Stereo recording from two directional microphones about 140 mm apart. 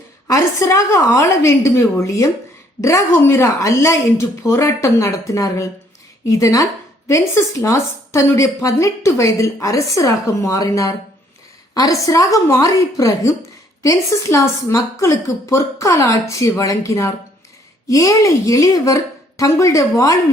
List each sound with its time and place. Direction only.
0.3 s a woman's voice: 25° left (ahead or behind)